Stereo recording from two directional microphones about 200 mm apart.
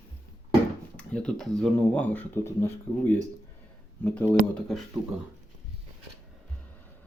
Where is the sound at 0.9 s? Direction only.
5° left (ahead or behind).